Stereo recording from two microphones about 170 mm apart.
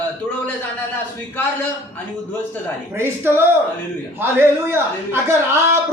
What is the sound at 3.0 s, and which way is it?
A man's voice, 15° right (ahead or behind).